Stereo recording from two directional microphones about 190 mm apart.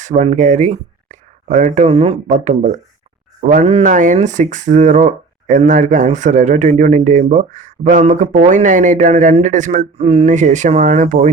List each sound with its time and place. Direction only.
0.0 s speech: 40° right (ahead or behind)